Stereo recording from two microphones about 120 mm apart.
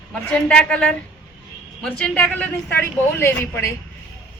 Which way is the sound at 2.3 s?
15° left (ahead or behind).